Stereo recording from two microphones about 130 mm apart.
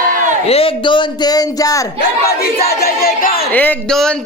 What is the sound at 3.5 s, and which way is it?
Speech, 15° left (ahead or behind).